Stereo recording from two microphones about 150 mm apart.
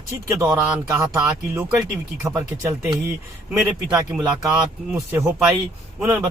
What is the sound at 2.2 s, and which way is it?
Speech, 20° right (ahead or behind).